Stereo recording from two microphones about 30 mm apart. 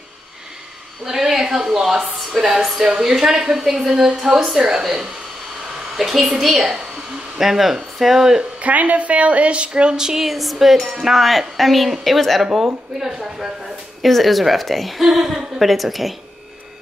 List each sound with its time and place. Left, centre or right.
1.0 s a woman's voice: centre
2.8 s a woman's voice: centre
5.9 s a woman's voice: centre
8.5 s a woman's voice: right
10.1 s a woman's voice: centre
10.8 s a woman's voice: centre
11.1 s a woman's voice: centre
12.5 s a woman's voice: centre
14.0 s a woman's voice: centre